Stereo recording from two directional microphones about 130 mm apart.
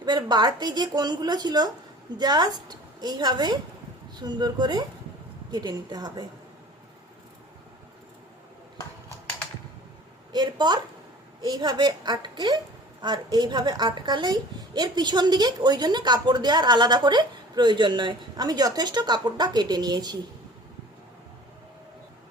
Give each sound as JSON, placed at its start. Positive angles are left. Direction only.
{"t": 0.0, "sound": "a woman's voice", "side_deg": -35}
{"t": 10.3, "sound": "a woman's voice", "side_deg": -35}